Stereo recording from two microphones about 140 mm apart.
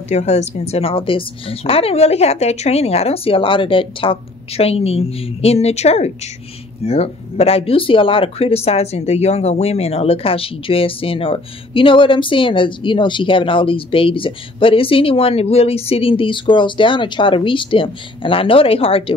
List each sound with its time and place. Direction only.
0.1 s a woman's voice: 50° left (ahead or behind)